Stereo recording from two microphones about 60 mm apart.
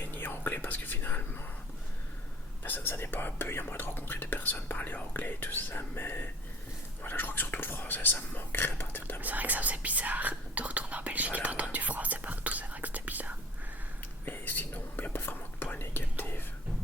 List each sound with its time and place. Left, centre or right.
0.0 s whispering: left
2.6 s speech: left
9.2 s speech: right
14.3 s whispering: left